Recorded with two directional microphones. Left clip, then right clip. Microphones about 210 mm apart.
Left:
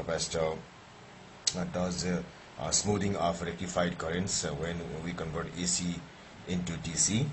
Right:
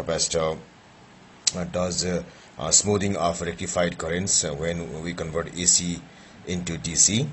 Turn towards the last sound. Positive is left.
turn(degrees=-35)  # may be behind; listen again after turning